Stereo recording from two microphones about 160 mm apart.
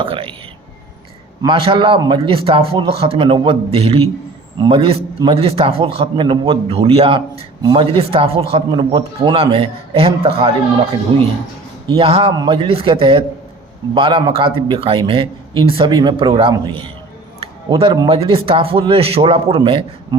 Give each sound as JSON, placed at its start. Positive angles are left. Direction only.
{"t": 0.0, "sound": "a man's voice", "side_deg": -35}
{"t": 1.4, "sound": "a man's voice", "side_deg": -35}
{"t": 11.9, "sound": "a man's voice", "side_deg": -35}
{"t": 17.9, "sound": "a man's voice", "side_deg": -30}